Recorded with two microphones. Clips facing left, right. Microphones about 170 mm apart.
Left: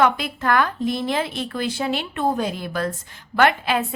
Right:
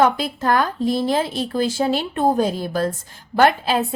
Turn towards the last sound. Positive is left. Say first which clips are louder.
# right 2 dB
turn(degrees=-30)  # may be behind; listen again after turning